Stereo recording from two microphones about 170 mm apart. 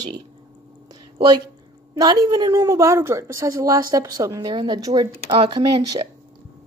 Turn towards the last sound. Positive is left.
turn(degrees=-25)  # may be behind; listen again after turning